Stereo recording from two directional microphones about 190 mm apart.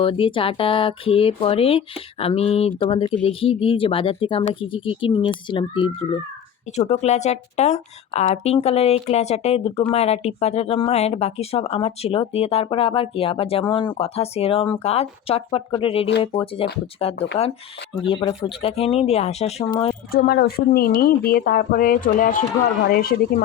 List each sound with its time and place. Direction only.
0.0 s speech: 30° left (ahead or behind)
20.1 s speech: 55° left (ahead or behind)